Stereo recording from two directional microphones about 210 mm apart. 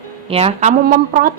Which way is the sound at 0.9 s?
45° right (ahead or behind).